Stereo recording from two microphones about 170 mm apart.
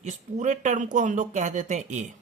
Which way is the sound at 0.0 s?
45° right (ahead or behind).